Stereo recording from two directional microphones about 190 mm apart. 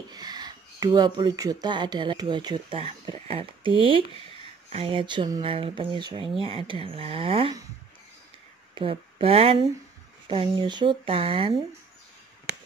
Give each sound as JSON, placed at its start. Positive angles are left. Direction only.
{"t": 0.1, "sound": "speech", "side_deg": -20}
{"t": 8.7, "sound": "speech", "side_deg": -30}